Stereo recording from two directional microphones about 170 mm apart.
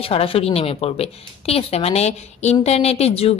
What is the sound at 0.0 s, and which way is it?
A woman's voice, 35° left (ahead or behind).